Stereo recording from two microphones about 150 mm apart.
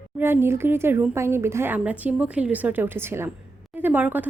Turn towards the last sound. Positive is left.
turn(degrees=-10)  # may be behind; listen again after turning